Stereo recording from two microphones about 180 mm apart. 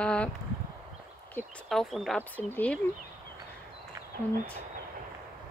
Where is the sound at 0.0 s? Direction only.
5° left (ahead or behind).